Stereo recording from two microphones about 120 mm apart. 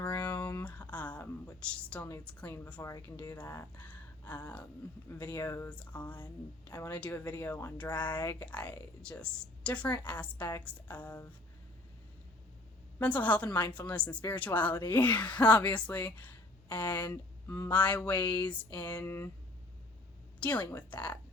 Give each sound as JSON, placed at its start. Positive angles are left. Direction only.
{"t": 0.0, "sound": "a sound", "side_deg": 15}
{"t": 2.8, "sound": "speech", "side_deg": 30}
{"t": 13.0, "sound": "speech", "side_deg": 15}
{"t": 20.4, "sound": "speech", "side_deg": 10}